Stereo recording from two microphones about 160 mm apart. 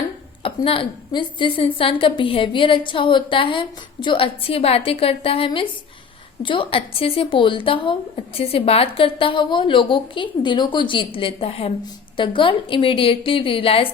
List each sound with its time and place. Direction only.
0.4 s a woman's voice: 35° left (ahead or behind)